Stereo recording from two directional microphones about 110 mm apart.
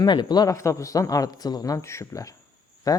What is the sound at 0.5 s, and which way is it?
Speech, 25° left (ahead or behind).